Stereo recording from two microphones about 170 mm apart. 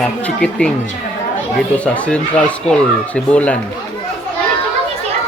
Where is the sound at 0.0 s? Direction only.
5° left (ahead or behind).